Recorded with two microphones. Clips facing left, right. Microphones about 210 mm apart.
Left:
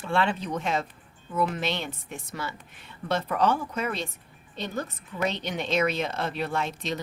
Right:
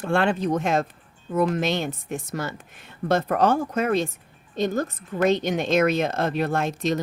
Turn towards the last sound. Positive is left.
turn(degrees=-45)  # may be behind; listen again after turning